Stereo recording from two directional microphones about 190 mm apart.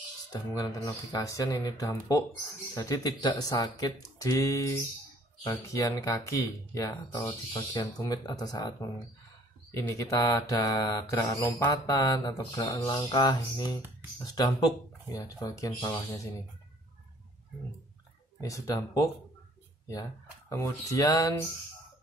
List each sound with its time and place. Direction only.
0.3 s speech: 20° left (ahead or behind)
9.8 s speech: 15° left (ahead or behind)
18.4 s speech: 15° left (ahead or behind)